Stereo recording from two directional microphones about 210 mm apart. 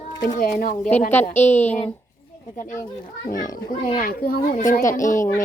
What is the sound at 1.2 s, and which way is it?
Speech, 35° left (ahead or behind).